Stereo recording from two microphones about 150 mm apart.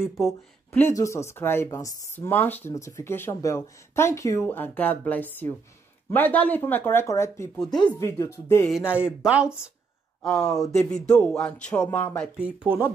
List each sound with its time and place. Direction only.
0.7 s speech: 15° left (ahead or behind)
8.6 s speech: 5° right (ahead or behind); by 12.3 s 10° left (ahead or behind)
12.4 s speech: 10° right (ahead or behind)